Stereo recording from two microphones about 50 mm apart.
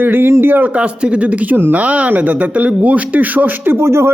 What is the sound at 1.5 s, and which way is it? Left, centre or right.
Speech, right.